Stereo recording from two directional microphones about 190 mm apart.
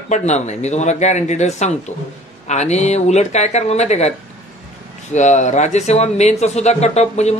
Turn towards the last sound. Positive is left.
turn(degrees=35)  # may be behind; listen again after turning